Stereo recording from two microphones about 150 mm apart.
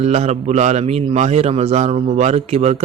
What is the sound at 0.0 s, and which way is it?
A man's voice, 45° right (ahead or behind).